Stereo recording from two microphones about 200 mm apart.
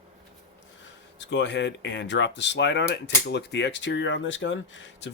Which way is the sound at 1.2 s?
65° left (ahead or behind).